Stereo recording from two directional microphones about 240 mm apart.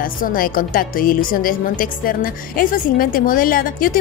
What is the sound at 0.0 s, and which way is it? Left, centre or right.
A woman's voice, left.